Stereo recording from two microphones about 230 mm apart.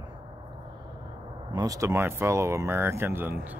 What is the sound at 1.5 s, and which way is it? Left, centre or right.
Speech, centre.